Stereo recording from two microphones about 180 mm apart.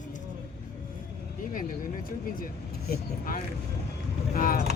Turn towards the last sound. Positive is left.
turn(degrees=50)  # may be behind; listen again after turning